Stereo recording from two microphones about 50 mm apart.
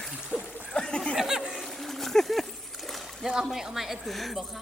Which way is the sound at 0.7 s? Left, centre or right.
Centre.